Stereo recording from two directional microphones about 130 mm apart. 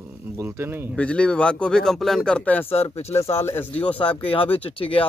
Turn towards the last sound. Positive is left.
turn(degrees=45)  # may be behind; listen again after turning